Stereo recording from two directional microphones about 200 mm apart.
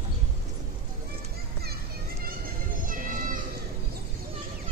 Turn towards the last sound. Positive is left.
turn(degrees=-40)  # may be behind; listen again after turning